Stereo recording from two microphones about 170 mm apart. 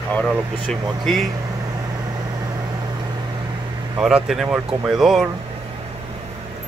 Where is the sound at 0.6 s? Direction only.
Centre (ahead or behind).